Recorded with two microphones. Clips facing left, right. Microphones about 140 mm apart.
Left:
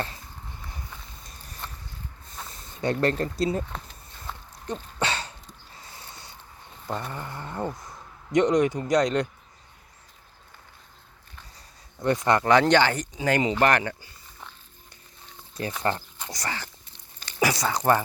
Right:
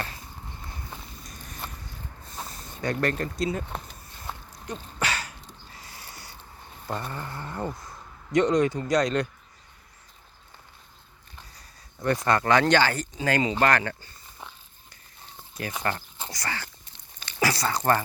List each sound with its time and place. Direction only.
2.5 s speech: 30° left (ahead or behind)
4.7 s a sound: 25° left (ahead or behind)
5.8 s owl: 25° left (ahead or behind)
7.1 s speech: 15° left (ahead or behind)
11.9 s speech: 20° left (ahead or behind)
15.8 s speech: 25° left (ahead or behind)